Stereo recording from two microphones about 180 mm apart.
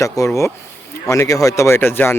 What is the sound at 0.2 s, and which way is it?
Speech, 20° left (ahead or behind).